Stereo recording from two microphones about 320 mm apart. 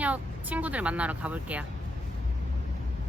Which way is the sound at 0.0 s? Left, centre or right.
Centre.